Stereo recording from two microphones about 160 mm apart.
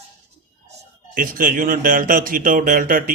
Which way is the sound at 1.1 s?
60° right (ahead or behind).